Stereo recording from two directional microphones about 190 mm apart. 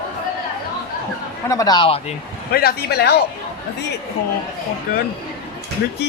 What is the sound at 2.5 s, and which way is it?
Speech, 55° left (ahead or behind).